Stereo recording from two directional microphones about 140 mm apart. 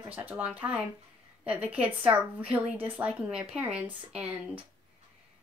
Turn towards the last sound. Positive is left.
turn(degrees=-10)  # may be behind; listen again after turning